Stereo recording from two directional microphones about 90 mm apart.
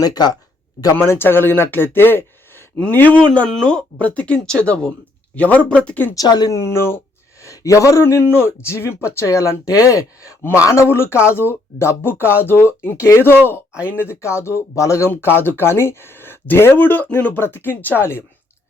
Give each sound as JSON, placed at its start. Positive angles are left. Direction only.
{"t": 0.0, "sound": "speech", "side_deg": 50}
{"t": 0.9, "sound": "speech", "side_deg": 30}
{"t": 6.1, "sound": "speech", "side_deg": 50}
{"t": 6.5, "sound": "speech", "side_deg": 30}
{"t": 13.7, "sound": "speech", "side_deg": -10}
{"t": 14.0, "sound": "speech", "side_deg": 30}